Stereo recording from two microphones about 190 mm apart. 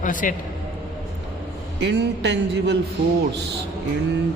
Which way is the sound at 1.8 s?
65° right (ahead or behind).